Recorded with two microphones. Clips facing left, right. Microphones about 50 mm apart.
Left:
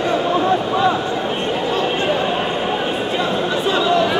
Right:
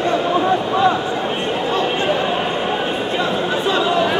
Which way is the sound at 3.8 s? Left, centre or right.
Centre.